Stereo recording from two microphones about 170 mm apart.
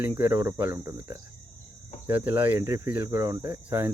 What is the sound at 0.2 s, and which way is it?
Speech, 15° right (ahead or behind).